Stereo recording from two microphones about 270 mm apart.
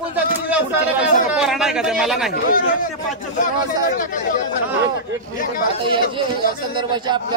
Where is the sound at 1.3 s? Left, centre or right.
Centre.